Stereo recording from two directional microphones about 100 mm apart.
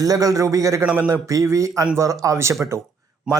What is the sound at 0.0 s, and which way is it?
Speech, 35° right (ahead or behind).